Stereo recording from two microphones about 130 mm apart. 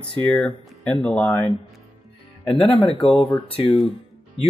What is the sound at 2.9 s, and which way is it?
Speech, 40° left (ahead or behind).